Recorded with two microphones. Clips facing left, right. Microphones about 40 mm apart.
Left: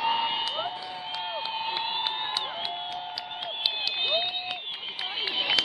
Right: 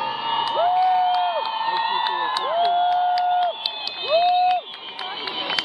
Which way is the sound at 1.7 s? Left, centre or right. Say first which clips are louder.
Right 9 dB; centre.